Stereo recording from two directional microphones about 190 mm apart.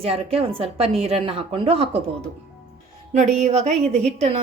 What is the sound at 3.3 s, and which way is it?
Speech, 40° right (ahead or behind).